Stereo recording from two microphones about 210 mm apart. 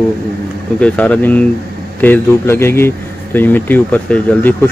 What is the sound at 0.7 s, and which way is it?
Speech, 5° left (ahead or behind).